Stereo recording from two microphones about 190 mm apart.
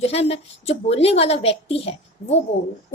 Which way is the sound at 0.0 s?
30° left (ahead or behind).